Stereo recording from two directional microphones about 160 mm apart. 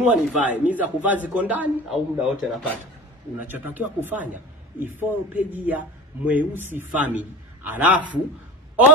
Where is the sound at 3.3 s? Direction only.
10° right (ahead or behind).